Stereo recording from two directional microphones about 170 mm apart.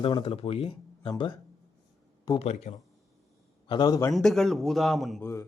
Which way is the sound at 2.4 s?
40° left (ahead or behind).